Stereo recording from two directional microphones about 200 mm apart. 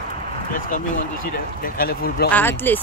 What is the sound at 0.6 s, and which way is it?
Speech, 40° left (ahead or behind).